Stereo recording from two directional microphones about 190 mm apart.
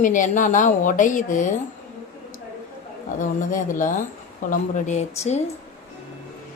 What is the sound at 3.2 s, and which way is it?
A woman's voice, 45° left (ahead or behind).